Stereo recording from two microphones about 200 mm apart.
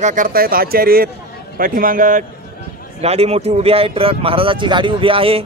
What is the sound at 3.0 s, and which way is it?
Speech, 30° right (ahead or behind).